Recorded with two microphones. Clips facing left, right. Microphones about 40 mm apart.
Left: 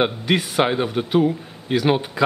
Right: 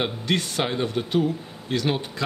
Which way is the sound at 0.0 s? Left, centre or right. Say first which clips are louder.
Left 5 dB; centre.